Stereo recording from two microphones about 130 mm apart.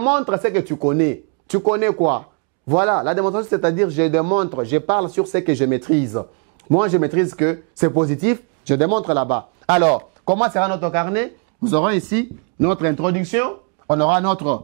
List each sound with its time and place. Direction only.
0.0 s speech: 15° right (ahead or behind)